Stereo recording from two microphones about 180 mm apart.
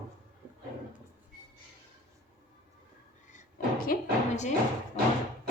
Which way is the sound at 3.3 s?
50° left (ahead or behind).